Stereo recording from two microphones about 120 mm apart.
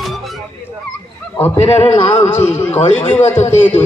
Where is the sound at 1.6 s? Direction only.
60° left (ahead or behind).